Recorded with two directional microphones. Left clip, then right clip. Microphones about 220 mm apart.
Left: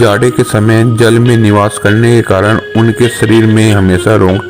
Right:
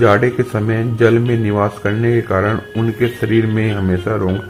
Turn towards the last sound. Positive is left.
turn(degrees=40)  # may be behind; listen again after turning